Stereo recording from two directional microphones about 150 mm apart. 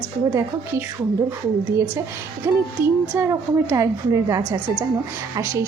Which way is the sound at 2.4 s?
10° right (ahead or behind).